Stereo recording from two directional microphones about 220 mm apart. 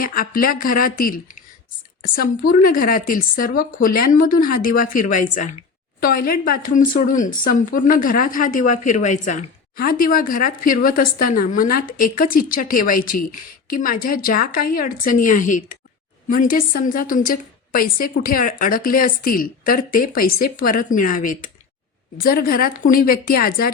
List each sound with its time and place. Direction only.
0.0 s speech: 40° left (ahead or behind)